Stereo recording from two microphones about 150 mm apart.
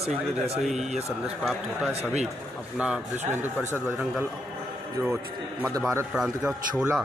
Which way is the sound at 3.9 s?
15° right (ahead or behind).